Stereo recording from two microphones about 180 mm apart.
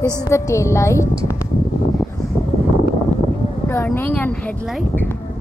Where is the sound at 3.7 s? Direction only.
15° left (ahead or behind).